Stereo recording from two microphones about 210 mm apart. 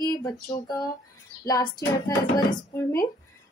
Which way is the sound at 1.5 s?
20° left (ahead or behind).